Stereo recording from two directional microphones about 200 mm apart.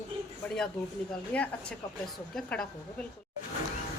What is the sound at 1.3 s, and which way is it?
A woman's voice, 5° left (ahead or behind).